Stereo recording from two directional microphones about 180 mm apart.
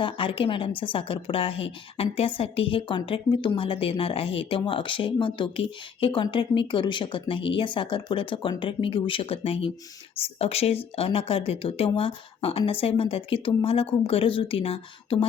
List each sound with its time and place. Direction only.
0.0 s a woman's voice: 30° left (ahead or behind)